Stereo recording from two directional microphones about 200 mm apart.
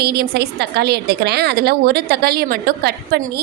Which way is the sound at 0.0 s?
55° right (ahead or behind).